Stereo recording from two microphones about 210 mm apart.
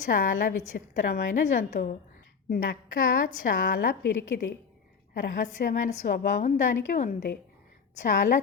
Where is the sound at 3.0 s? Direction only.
40° left (ahead or behind).